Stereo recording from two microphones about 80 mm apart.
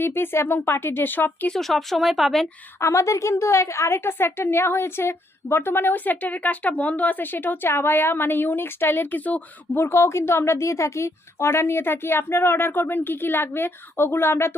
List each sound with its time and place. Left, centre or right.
0.0 s a woman's voice: left
1.5 s speech: centre
2.8 s a woman's voice: left
9.8 s speech: left